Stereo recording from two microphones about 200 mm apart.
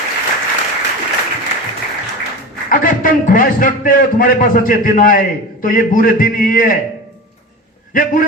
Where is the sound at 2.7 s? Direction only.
45° left (ahead or behind).